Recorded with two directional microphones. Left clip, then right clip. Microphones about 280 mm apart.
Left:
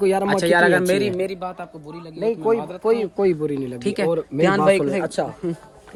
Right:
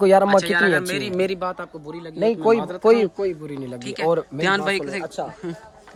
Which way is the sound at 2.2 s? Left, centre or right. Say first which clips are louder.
Right 2 dB; right.